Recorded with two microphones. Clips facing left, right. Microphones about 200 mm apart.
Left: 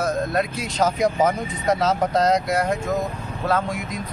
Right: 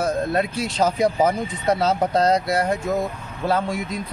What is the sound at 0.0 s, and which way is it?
Speech, 30° right (ahead or behind).